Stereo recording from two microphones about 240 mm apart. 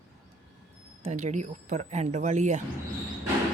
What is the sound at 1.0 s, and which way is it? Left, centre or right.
Speech, right.